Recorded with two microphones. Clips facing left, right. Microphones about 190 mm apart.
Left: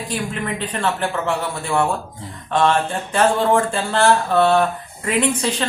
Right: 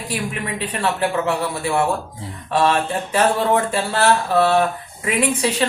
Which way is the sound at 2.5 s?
5° right (ahead or behind).